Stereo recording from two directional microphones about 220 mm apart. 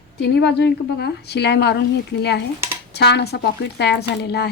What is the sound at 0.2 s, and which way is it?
A woman's voice, 50° left (ahead or behind).